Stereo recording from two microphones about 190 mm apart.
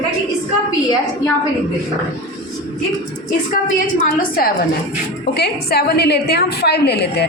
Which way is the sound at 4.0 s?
45° left (ahead or behind).